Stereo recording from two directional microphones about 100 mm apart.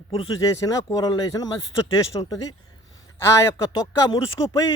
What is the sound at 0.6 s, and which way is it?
Speech, 35° left (ahead or behind).